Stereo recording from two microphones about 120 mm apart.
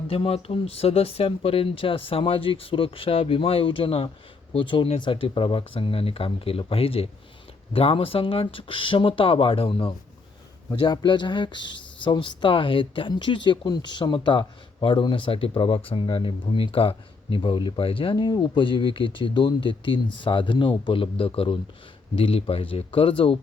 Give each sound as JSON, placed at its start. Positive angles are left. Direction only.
{"t": 0.1, "sound": "speech", "side_deg": 55}
{"t": 10.7, "sound": "speech", "side_deg": 35}